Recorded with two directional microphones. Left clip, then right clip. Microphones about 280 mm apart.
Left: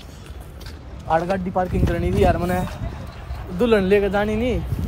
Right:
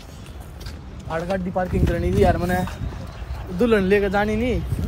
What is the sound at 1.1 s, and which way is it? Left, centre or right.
A man's voice, centre.